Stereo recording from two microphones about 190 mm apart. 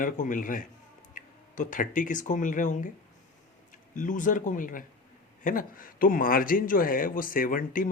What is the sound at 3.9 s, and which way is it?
A man's voice, 45° left (ahead or behind).